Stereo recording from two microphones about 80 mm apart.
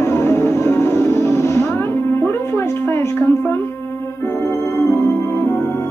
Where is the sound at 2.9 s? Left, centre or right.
Left.